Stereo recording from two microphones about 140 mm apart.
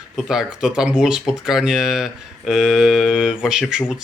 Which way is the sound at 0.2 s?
5° right (ahead or behind).